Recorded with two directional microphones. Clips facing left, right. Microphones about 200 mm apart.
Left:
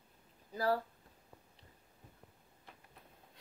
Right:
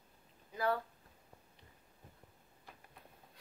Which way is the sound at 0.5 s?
35° left (ahead or behind).